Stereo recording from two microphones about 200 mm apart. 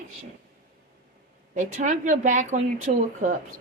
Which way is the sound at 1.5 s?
40° right (ahead or behind).